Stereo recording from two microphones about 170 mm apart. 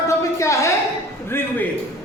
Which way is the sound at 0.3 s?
15° left (ahead or behind).